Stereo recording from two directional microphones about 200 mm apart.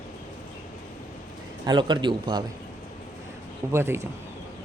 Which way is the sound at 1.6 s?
20° right (ahead or behind).